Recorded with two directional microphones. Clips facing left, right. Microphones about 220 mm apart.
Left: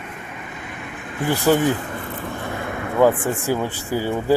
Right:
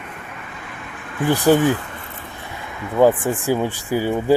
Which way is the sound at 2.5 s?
55° left (ahead or behind).